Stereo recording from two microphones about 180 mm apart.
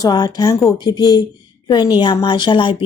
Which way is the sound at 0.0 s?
20° left (ahead or behind).